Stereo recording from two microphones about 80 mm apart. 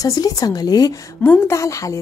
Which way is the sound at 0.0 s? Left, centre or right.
Left.